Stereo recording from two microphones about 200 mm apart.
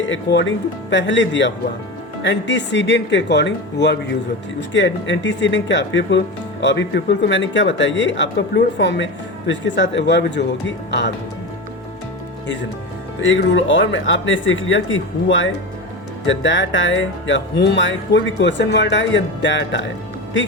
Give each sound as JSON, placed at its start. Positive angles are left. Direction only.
{"t": 0.1, "sound": "speech", "side_deg": 65}
{"t": 13.1, "sound": "speech", "side_deg": 65}